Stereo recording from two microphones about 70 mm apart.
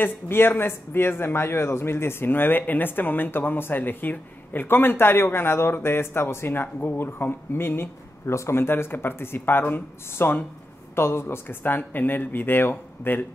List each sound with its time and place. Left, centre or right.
0.0 s a man's voice: left